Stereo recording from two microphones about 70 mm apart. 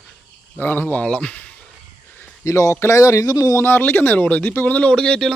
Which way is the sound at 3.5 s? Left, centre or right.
Left.